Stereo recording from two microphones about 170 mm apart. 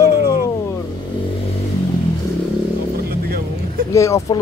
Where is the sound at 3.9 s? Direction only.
20° left (ahead or behind).